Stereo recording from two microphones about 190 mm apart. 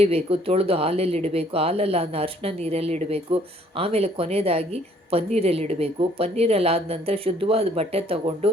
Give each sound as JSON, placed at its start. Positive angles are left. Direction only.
{"t": 0.0, "sound": "speech", "side_deg": -30}